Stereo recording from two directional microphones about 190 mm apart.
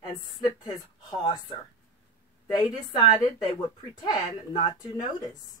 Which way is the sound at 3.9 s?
25° left (ahead or behind).